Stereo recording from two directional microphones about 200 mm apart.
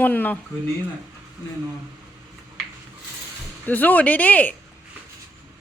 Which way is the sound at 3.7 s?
10° left (ahead or behind).